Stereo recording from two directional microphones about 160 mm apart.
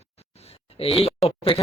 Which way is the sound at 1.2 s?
35° left (ahead or behind).